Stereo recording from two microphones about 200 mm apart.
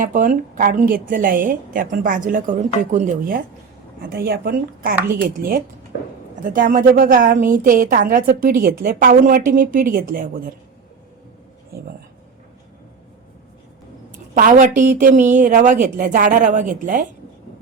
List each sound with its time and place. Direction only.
0.0 s a woman's voice: 40° right (ahead or behind)
11.7 s a woman's voice: 50° right (ahead or behind)
14.1 s a woman's voice: 40° right (ahead or behind)